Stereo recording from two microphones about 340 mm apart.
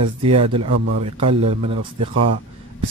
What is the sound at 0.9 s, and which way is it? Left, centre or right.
Speech, centre.